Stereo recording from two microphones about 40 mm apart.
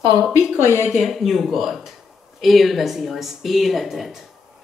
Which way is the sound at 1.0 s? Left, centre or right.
Centre.